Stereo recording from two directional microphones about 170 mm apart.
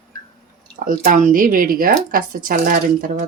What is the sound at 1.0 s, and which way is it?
Speech, 50° right (ahead or behind).